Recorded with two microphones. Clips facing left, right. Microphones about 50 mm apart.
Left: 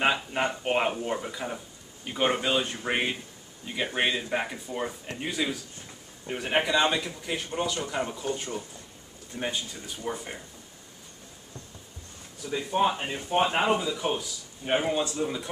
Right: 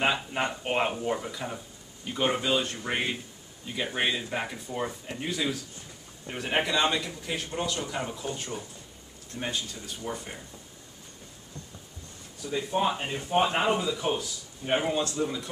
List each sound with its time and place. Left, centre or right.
0.0 s a man's voice: centre
12.4 s a man's voice: centre